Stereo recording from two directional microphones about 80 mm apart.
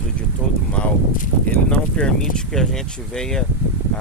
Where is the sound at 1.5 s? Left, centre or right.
Centre.